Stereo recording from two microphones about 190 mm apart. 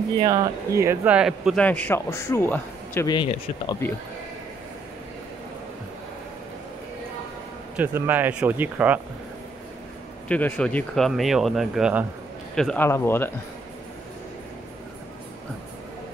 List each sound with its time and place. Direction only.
0.2 s a man's voice: 20° right (ahead or behind); by 3.2 s 15° left (ahead or behind)
3.2 s speech: 25° left (ahead or behind)
7.7 s speech: 10° right (ahead or behind)
10.2 s speech: 10° left (ahead or behind)
12.5 s a man's voice: 5° left (ahead or behind)